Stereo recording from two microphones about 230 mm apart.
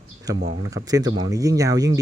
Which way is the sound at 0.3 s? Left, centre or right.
Centre.